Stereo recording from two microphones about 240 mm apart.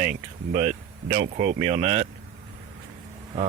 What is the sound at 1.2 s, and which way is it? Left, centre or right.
Speech, right.